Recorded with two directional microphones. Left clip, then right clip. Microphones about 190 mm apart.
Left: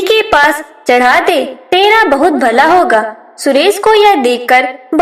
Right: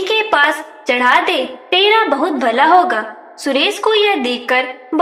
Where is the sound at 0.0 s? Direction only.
30° left (ahead or behind).